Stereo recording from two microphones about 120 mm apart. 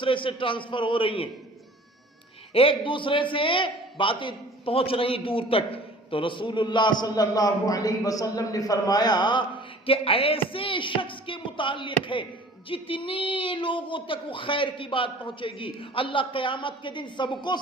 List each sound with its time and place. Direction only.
0.0 s a man's voice: 45° left (ahead or behind)
2.5 s a man's voice: 50° left (ahead or behind)